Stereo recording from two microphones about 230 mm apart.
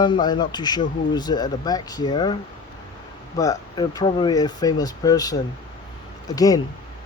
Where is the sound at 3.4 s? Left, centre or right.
Centre.